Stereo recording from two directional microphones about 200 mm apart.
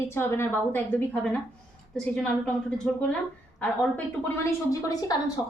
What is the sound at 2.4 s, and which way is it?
A woman's voice, 5° left (ahead or behind).